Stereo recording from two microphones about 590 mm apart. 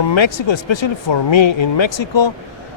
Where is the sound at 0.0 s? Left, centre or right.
Left.